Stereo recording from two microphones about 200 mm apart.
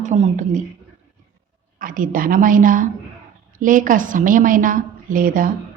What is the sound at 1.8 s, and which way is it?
A woman's voice, 45° right (ahead or behind).